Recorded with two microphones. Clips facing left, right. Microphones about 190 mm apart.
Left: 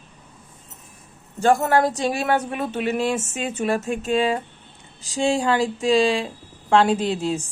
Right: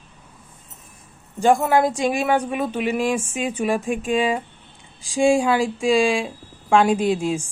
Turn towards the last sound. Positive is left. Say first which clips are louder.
# right 2 dB
turn(degrees=-10)  # may be behind; listen again after turning